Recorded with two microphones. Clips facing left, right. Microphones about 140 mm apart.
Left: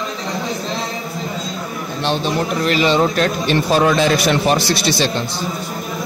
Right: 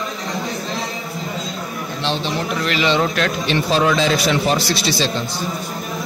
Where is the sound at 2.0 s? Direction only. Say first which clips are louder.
Left 4 dB; 45° left (ahead or behind).